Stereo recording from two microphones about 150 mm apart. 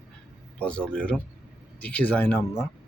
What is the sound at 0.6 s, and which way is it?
A man's voice, 5° left (ahead or behind).